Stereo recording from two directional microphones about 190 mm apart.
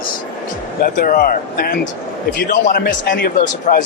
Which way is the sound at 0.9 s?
45° left (ahead or behind).